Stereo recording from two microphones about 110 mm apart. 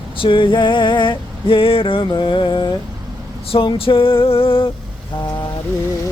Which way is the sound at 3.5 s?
55° left (ahead or behind).